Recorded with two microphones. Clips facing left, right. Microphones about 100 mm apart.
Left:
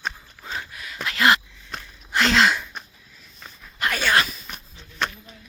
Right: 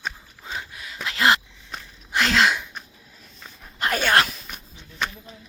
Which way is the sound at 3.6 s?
40° right (ahead or behind).